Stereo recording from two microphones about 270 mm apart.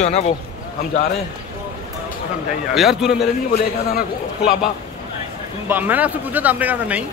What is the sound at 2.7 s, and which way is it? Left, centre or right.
Speech, centre.